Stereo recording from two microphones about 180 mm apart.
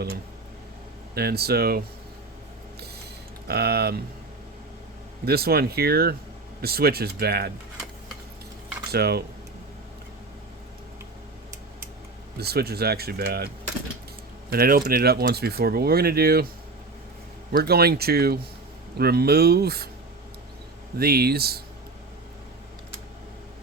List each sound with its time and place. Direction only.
1.1 s speech: 60° right (ahead or behind)
3.4 s speech: 65° right (ahead or behind)
5.2 s speech: 60° right (ahead or behind)
8.9 s speech: 60° right (ahead or behind)
12.4 s speech: 60° right (ahead or behind)
14.5 s speech: 60° right (ahead or behind)
17.5 s speech: 60° right (ahead or behind)
21.0 s speech: 60° right (ahead or behind)